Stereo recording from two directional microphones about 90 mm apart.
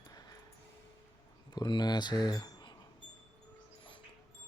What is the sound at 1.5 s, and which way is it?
Speech, 50° left (ahead or behind).